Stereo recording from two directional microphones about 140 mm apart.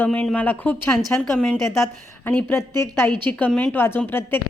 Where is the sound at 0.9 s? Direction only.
Centre (ahead or behind).